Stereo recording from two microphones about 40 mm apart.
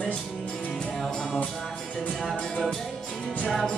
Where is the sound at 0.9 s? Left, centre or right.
Centre.